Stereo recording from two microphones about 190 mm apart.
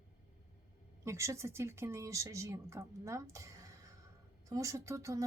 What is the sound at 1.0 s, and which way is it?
Speech, 15° right (ahead or behind).